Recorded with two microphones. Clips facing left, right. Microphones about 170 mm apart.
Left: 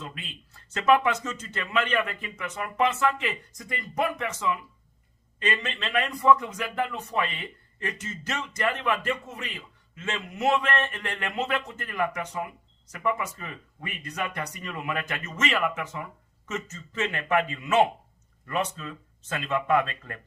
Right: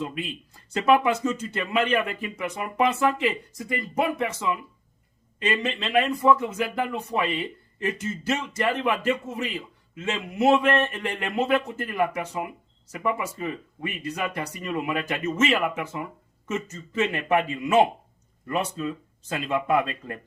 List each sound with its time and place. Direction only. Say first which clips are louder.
0.0 s speech: right 9 dB; 10° right (ahead or behind)